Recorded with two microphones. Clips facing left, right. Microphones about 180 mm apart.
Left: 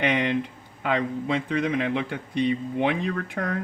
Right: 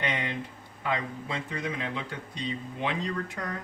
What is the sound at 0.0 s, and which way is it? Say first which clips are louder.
Speech: left 8 dB; 70° left (ahead or behind).